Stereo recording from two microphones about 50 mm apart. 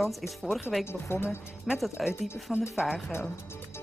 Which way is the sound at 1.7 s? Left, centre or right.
Centre.